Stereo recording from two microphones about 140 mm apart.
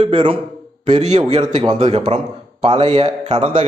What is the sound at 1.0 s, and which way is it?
A man's voice, 55° right (ahead or behind).